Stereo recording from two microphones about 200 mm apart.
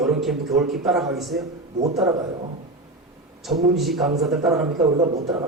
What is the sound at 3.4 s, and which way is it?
A man's voice, centre (ahead or behind).